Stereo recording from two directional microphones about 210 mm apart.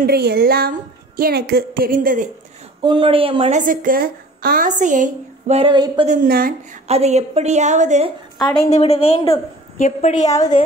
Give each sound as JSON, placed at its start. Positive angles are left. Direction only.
{"t": 0.0, "sound": "a woman's voice", "side_deg": -50}
{"t": 2.8, "sound": "a woman's voice", "side_deg": -25}
{"t": 6.0, "sound": "a woman's voice", "side_deg": -45}
{"t": 6.9, "sound": "a woman's voice", "side_deg": -30}
{"t": 8.5, "sound": "a woman's voice", "side_deg": 30}
{"t": 10.2, "sound": "a woman's voice", "side_deg": 15}